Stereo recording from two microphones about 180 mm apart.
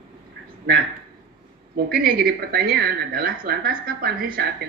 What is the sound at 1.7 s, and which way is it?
Speech, 55° right (ahead or behind).